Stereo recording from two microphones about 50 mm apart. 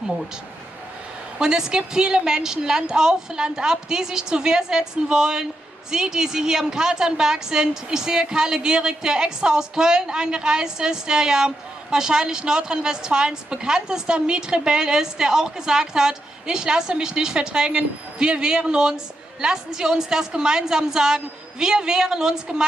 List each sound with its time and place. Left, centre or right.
1.4 s a woman's voice: centre